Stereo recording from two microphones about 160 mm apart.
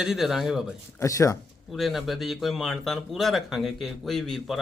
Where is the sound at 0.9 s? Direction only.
20° left (ahead or behind).